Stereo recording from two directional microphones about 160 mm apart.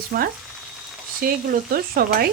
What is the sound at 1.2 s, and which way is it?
Frying, 65° right (ahead or behind).